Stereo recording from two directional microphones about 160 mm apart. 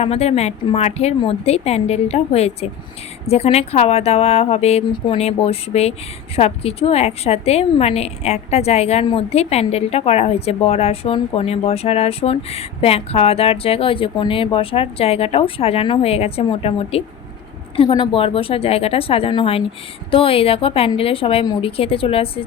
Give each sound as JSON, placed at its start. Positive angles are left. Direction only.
{"t": 0.0, "sound": "a woman's voice", "side_deg": 40}